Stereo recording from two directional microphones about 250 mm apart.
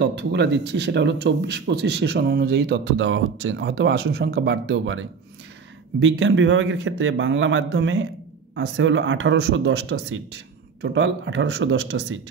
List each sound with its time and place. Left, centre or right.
0.0 s speech: right